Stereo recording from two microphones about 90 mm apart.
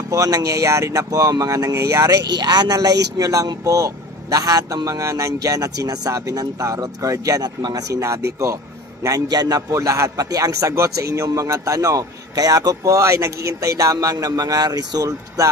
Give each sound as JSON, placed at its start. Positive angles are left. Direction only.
{"t": 0.1, "sound": "a man's voice", "side_deg": -40}